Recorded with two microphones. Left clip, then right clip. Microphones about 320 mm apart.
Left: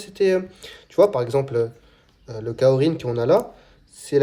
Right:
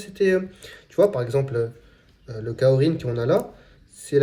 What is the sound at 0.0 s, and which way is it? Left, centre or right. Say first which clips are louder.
Speech: left 1 dB; centre.